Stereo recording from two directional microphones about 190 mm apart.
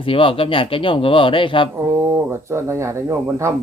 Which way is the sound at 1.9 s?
15° right (ahead or behind).